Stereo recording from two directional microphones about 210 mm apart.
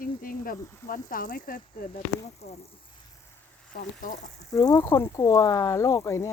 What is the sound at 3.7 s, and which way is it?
Speech, 40° left (ahead or behind).